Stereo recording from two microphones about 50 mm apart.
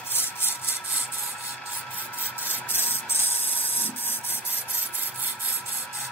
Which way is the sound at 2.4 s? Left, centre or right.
Left.